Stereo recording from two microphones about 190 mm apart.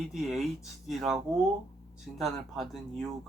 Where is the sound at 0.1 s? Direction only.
Centre (ahead or behind).